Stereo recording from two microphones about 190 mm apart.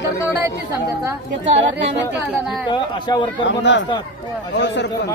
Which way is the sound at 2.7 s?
25° left (ahead or behind).